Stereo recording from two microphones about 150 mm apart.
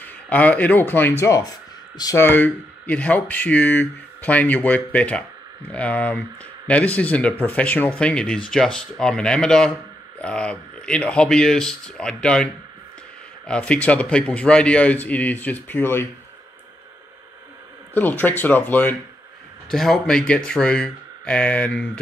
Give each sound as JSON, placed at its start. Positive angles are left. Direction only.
{"t": 0.0, "sound": "speech", "side_deg": 10}
{"t": 2.2, "sound": "speech", "side_deg": 10}
{"t": 13.5, "sound": "speech", "side_deg": 5}
{"t": 17.9, "sound": "speech", "side_deg": 10}